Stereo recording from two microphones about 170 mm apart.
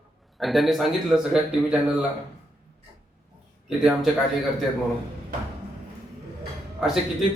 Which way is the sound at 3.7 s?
Centre (ahead or behind).